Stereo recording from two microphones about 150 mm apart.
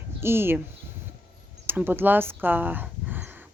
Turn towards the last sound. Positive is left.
turn(degrees=-10)  # may be behind; listen again after turning